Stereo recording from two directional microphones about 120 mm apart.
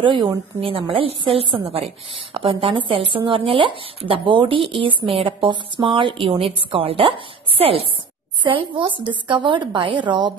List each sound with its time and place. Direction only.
0.0 s a woman's voice: 45° right (ahead or behind)